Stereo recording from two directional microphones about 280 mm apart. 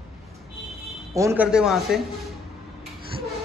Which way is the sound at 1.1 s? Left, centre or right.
Centre.